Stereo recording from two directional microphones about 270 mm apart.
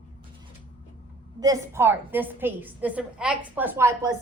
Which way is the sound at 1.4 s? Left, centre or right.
Centre.